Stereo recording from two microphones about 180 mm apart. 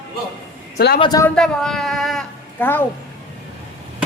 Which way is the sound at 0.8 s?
65° left (ahead or behind).